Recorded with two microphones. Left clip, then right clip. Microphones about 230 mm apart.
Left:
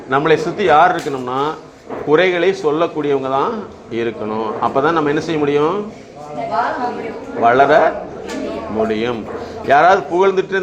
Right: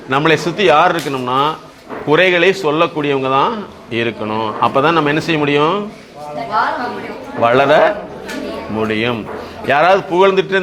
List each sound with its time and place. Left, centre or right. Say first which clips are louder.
0.1 s a man's voice: right 1 dB; right
7.4 s a man's voice: even; right